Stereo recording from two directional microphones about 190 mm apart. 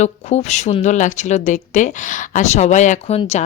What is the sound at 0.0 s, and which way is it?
Speech, 35° left (ahead or behind).